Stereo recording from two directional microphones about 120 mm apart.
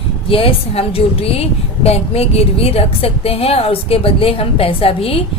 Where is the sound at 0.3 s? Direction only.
50° left (ahead or behind).